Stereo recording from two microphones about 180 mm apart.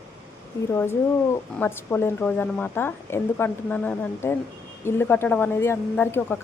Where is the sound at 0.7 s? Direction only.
15° left (ahead or behind).